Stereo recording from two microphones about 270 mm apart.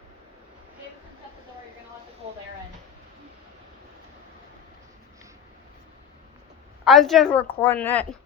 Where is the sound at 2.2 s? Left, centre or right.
Right.